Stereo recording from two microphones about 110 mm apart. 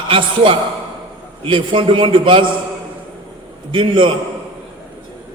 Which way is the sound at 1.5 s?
50° right (ahead or behind).